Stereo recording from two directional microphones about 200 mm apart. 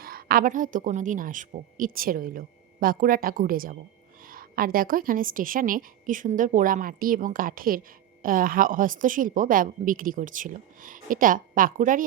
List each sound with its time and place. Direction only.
0.0 s a woman's voice: 50° right (ahead or behind)